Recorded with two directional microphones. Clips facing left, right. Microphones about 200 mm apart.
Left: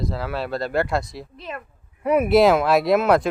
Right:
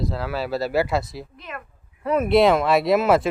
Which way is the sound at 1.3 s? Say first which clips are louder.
Left 3 dB; 30° left (ahead or behind).